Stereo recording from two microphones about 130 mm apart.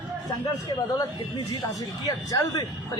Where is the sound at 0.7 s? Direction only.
30° left (ahead or behind).